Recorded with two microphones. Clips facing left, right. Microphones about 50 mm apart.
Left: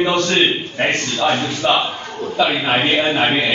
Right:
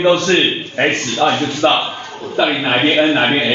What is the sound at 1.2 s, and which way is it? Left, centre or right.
Speech, right.